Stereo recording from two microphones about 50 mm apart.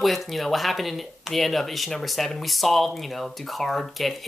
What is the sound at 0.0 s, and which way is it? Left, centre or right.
Speech, centre.